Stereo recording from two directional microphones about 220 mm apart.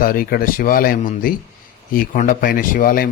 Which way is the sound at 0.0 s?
40° left (ahead or behind).